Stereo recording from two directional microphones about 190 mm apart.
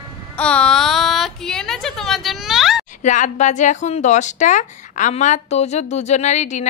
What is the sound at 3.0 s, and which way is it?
A woman's voice, 40° left (ahead or behind).